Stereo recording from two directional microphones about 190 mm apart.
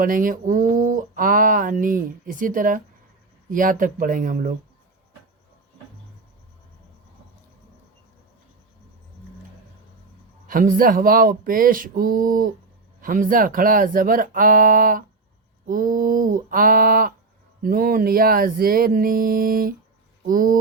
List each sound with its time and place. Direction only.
0.0 s speech: 45° right (ahead or behind)
10.4 s speech: 45° right (ahead or behind)